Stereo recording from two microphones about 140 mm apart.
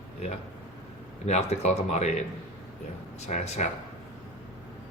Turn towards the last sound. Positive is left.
turn(degrees=55)  # may be behind; listen again after turning